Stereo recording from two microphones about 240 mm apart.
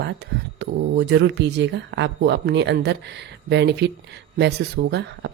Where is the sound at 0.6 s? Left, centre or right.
Right.